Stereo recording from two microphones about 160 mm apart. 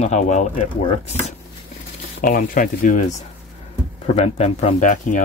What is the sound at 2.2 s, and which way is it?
Speech, 60° left (ahead or behind).